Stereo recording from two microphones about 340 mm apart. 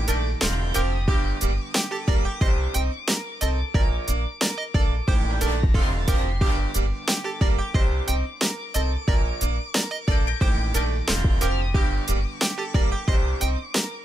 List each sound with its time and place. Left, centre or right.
0.0 s music: centre
4.4 s music: centre